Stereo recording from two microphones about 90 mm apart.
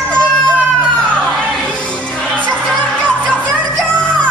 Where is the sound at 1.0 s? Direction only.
10° left (ahead or behind).